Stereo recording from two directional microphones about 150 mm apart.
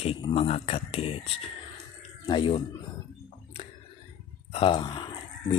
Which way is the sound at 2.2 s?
35° left (ahead or behind).